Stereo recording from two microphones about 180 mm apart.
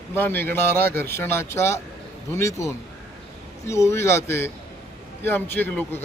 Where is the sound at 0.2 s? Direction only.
10° left (ahead or behind).